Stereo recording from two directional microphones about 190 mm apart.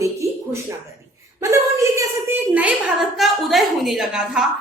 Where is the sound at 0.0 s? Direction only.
15° right (ahead or behind).